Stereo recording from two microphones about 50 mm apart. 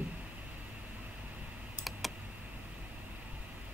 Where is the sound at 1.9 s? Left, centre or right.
Centre.